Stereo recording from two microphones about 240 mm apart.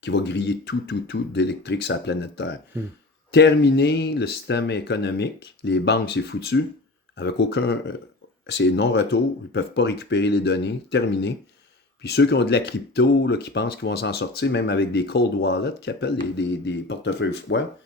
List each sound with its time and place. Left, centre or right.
0.0 s speech: left